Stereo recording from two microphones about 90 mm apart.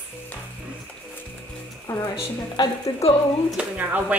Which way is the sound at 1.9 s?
20° left (ahead or behind).